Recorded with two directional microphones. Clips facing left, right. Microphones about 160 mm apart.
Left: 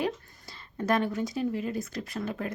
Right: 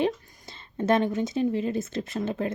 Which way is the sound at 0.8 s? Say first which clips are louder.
Right 4 dB; 25° right (ahead or behind).